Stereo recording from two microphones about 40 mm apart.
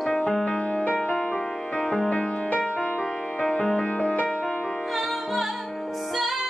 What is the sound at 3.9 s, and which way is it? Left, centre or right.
Music, left.